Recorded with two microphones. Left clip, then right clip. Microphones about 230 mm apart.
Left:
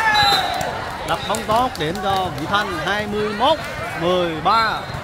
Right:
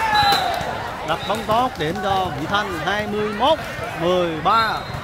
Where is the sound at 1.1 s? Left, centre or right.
Centre.